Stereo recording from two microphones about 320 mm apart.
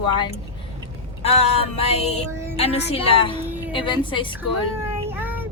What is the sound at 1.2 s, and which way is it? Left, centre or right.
Female singing, centre.